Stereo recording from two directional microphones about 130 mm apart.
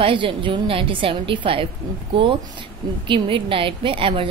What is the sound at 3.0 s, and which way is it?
A woman's voice, 40° right (ahead or behind).